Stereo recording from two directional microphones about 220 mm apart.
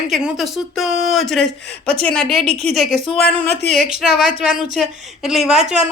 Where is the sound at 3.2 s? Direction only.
45° left (ahead or behind).